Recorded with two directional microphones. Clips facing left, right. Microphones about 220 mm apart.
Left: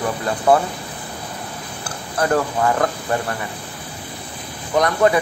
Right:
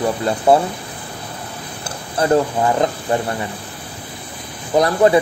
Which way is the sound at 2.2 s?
20° right (ahead or behind).